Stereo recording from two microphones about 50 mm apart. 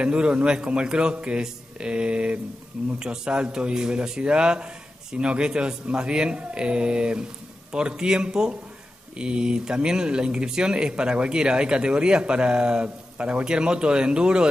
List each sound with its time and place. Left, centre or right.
0.0 s a man's voice: right